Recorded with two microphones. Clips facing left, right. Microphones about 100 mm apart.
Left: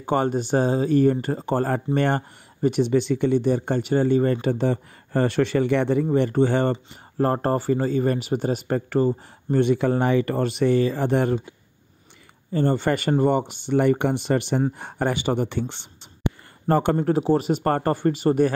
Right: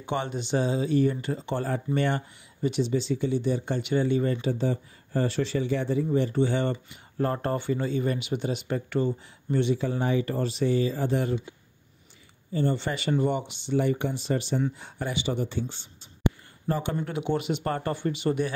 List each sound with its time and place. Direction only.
0.0 s speech: 45° left (ahead or behind); by 6.0 s 65° left (ahead or behind)
6.0 s speech: 55° left (ahead or behind)
12.5 s speech: 50° left (ahead or behind)
16.6 s speech: 55° left (ahead or behind)
16.9 s speech: 35° left (ahead or behind)